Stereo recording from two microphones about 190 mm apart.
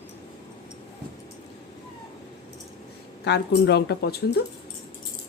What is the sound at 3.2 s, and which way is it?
Speech, 65° left (ahead or behind).